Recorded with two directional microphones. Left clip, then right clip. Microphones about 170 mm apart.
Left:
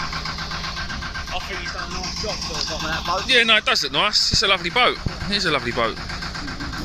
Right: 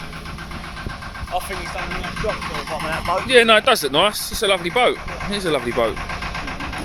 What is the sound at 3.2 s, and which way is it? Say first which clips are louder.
Speech: right 4 dB; 30° right (ahead or behind).